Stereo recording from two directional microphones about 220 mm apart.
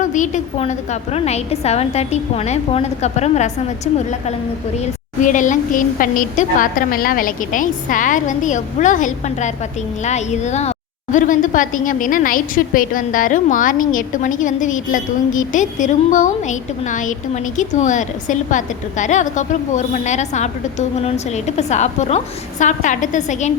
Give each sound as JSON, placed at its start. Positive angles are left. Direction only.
{"t": 0.0, "sound": "a woman's voice", "side_deg": 35}
{"t": 5.2, "sound": "a woman's voice", "side_deg": 35}